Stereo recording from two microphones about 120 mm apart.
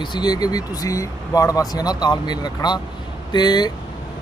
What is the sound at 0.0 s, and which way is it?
Speech, 35° left (ahead or behind).